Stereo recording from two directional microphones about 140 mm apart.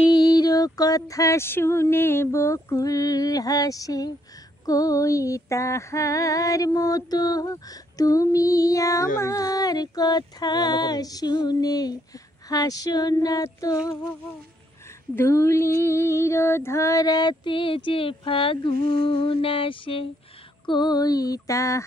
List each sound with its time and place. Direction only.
0.0 s music: 30° left (ahead or behind)
15.1 s female singing: 20° left (ahead or behind); by 20.1 s 40° left (ahead or behind)
20.6 s music: 30° left (ahead or behind)